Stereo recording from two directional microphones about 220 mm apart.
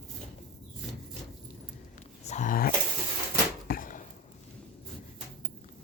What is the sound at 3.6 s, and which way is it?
Chop, 40° left (ahead or behind).